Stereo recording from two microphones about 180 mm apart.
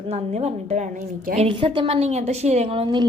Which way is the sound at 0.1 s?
35° right (ahead or behind).